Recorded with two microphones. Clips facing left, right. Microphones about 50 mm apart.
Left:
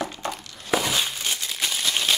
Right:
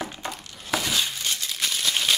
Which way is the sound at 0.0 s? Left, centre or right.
Centre.